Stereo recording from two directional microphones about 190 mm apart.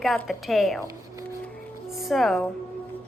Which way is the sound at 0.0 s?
Centre (ahead or behind).